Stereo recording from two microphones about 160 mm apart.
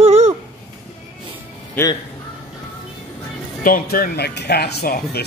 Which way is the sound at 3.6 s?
60° left (ahead or behind).